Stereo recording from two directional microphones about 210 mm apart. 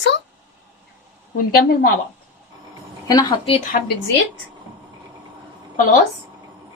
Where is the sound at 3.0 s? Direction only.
15° left (ahead or behind).